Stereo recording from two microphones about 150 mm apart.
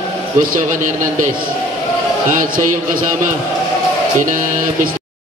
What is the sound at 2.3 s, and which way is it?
Music, 60° right (ahead or behind).